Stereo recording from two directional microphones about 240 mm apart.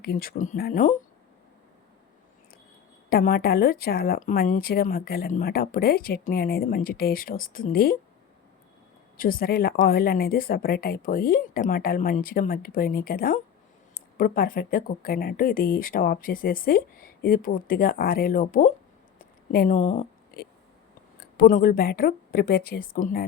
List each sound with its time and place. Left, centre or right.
0.0 s a woman's voice: left
3.1 s a woman's voice: left
9.1 s a woman's voice: left
21.2 s a woman's voice: left